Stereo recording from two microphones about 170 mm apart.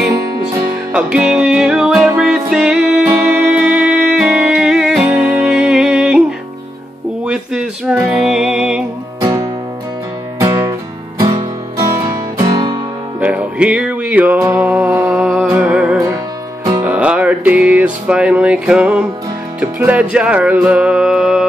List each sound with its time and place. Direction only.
0.9 s music: 5° right (ahead or behind)
7.2 s a sound: 5° right (ahead or behind)
8.2 s music: 5° right (ahead or behind)
9.2 s music: 20° right (ahead or behind)
13.2 s music: 5° right (ahead or behind)